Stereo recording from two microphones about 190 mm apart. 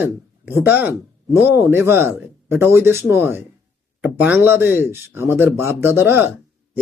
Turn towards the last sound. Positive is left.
turn(degrees=-10)  # may be behind; listen again after turning